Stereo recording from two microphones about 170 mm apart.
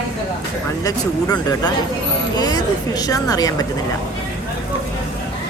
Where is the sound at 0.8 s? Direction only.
20° left (ahead or behind).